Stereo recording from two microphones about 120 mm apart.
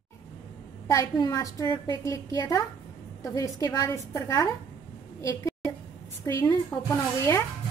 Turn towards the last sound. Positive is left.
turn(degrees=20)  # may be behind; listen again after turning